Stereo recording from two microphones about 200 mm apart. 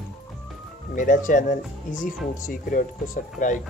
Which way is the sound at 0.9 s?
40° left (ahead or behind).